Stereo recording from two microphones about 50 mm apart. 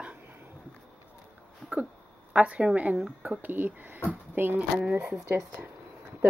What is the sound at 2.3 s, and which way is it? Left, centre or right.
Speech, right.